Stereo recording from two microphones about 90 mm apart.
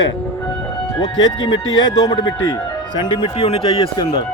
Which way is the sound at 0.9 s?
60° left (ahead or behind).